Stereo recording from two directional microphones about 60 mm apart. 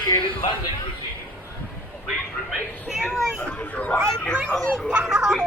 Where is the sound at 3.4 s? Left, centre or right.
Left.